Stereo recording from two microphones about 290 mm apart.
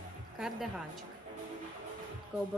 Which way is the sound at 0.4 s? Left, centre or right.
Centre.